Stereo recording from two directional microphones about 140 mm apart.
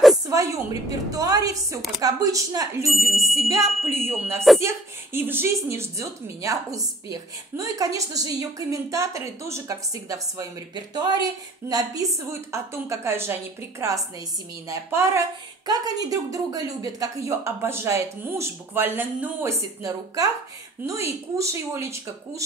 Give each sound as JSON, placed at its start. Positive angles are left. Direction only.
{"t": 0.3, "sound": "a woman's voice", "side_deg": -25}
{"t": 3.1, "sound": "music", "side_deg": 0}
{"t": 3.4, "sound": "a woman's voice", "side_deg": -20}
{"t": 15.6, "sound": "a woman's voice", "side_deg": -25}